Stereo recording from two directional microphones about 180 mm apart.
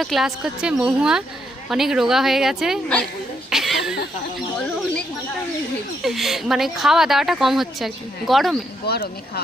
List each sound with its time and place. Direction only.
0.0 s speech: centre (ahead or behind)
3.5 s a sound: centre (ahead or behind)
6.0 s speech: centre (ahead or behind)
8.9 s speech: 60° left (ahead or behind)